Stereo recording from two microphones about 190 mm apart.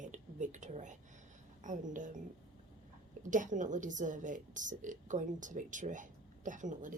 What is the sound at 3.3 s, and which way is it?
A woman's voice, 40° right (ahead or behind).